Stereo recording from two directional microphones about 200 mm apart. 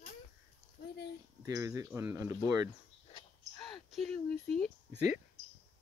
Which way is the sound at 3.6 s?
Centre (ahead or behind).